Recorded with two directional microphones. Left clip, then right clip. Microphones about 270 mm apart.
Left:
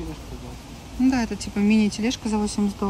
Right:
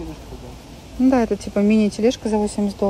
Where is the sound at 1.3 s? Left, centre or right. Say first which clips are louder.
Right 4 dB; centre.